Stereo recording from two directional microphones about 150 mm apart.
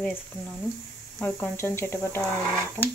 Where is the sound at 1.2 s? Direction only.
15° left (ahead or behind).